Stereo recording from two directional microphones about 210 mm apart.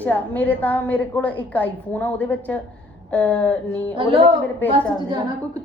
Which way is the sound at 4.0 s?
25° right (ahead or behind).